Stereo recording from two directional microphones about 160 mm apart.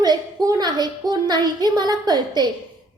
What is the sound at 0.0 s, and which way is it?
A woman's voice, 25° right (ahead or behind).